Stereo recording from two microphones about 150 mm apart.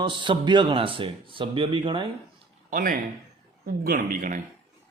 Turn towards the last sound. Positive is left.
turn(degrees=-65)  # may be behind; listen again after turning